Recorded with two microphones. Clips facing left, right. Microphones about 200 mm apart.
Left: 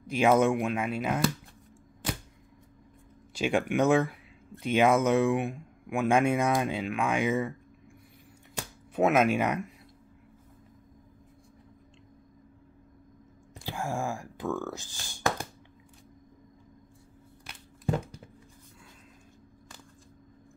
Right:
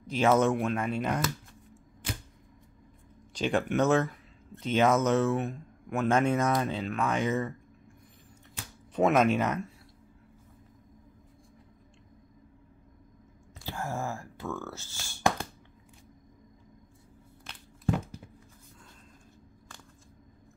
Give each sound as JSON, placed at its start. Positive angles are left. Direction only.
{"t": 0.0, "sound": "speech", "side_deg": 10}
{"t": 3.3, "sound": "speech", "side_deg": 10}
{"t": 8.9, "sound": "speech", "side_deg": 5}
{"t": 13.7, "sound": "a sound", "side_deg": 15}
{"t": 14.6, "sound": "speech", "side_deg": 15}